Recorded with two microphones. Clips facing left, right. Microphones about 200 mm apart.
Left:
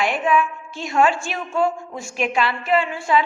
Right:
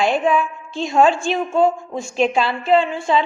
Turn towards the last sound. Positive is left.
turn(degrees=-25)  # may be behind; listen again after turning